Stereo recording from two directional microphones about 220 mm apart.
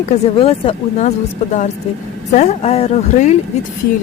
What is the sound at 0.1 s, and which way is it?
Speech, 25° left (ahead or behind).